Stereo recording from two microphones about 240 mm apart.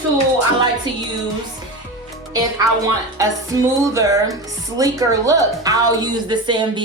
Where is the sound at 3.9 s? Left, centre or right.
Centre.